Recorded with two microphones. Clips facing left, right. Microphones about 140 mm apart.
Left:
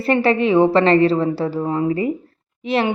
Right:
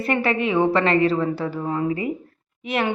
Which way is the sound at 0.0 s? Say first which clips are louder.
Left 5 dB; 30° left (ahead or behind).